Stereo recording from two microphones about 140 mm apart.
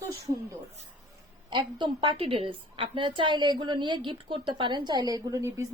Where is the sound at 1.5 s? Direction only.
35° right (ahead or behind).